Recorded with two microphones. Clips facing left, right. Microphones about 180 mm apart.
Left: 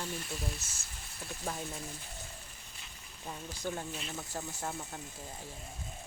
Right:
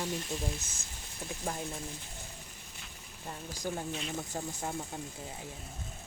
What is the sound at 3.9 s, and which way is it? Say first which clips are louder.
Speech: right 4 dB; centre (ahead or behind).